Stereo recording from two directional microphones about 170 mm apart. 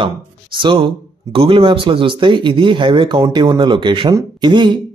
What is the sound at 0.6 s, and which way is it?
Speech, 30° right (ahead or behind).